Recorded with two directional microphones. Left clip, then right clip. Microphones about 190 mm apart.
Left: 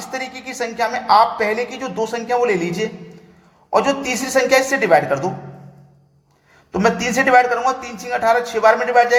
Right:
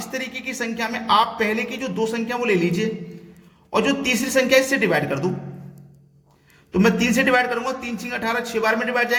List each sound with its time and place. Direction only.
0.4 s a woman's voice: 20° right (ahead or behind)
6.7 s a woman's voice: 20° right (ahead or behind)